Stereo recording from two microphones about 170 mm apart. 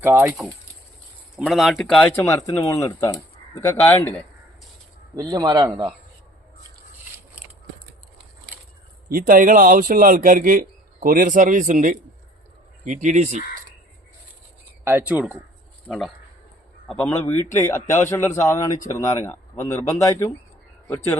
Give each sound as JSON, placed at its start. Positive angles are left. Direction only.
{"t": 0.0, "sound": "speech", "side_deg": -10}
{"t": 1.4, "sound": "speech", "side_deg": 0}
{"t": 5.1, "sound": "speech", "side_deg": -20}
{"t": 9.1, "sound": "a man's voice", "side_deg": -55}
{"t": 14.8, "sound": "speech", "side_deg": -10}
{"t": 17.1, "sound": "speech", "side_deg": 15}